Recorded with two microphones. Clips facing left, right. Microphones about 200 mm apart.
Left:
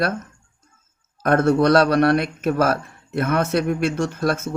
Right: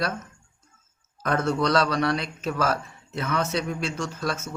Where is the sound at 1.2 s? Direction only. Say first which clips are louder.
Left 8 dB; 55° left (ahead or behind).